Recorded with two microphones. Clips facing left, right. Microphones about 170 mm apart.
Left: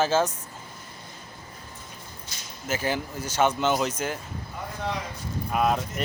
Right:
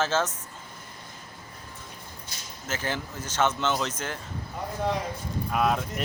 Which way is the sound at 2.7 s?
10° left (ahead or behind).